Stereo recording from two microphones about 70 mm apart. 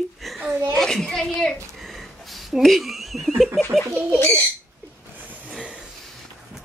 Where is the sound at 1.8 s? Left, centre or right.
Centre.